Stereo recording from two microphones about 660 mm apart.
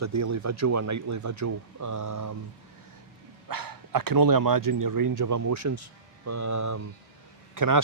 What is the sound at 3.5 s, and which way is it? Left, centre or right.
Speech, right.